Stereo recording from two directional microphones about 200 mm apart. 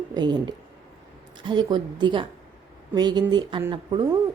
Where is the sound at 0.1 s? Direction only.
20° right (ahead or behind).